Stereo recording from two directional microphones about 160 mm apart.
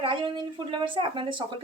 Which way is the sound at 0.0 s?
30° right (ahead or behind).